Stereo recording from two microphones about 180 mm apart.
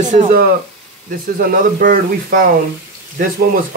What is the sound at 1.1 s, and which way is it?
Speech, 55° right (ahead or behind).